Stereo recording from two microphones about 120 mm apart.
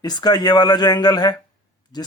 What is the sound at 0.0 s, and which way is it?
Speech, 35° left (ahead or behind).